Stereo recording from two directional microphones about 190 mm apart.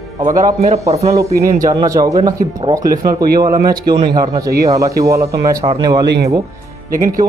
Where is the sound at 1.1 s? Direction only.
15° right (ahead or behind).